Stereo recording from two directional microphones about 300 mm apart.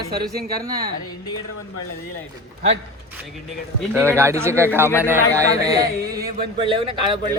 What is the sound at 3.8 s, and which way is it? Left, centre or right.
Speech, centre.